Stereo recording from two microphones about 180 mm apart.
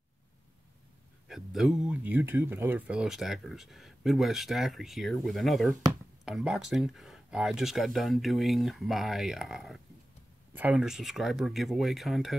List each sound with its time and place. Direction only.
1.3 s speech: centre (ahead or behind)